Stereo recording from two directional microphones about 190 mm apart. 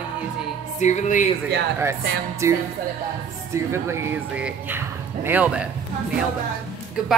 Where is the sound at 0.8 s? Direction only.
40° left (ahead or behind).